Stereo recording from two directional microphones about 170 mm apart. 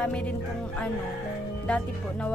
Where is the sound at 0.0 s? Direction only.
5° left (ahead or behind).